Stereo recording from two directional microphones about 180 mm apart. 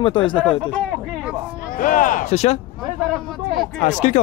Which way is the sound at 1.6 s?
50° left (ahead or behind).